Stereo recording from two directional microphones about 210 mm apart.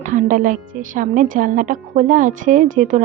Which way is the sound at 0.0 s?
40° right (ahead or behind).